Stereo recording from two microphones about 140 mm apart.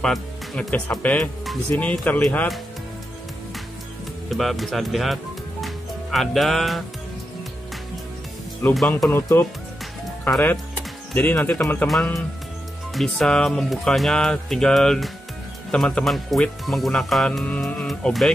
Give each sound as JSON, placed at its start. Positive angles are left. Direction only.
{"t": 0.0, "sound": "speech", "side_deg": 5}
{"t": 4.3, "sound": "speech", "side_deg": 0}
{"t": 8.7, "sound": "speech", "side_deg": 5}
{"t": 9.1, "sound": "speech", "side_deg": 15}
{"t": 11.1, "sound": "speech", "side_deg": 15}
{"t": 12.9, "sound": "speech", "side_deg": 0}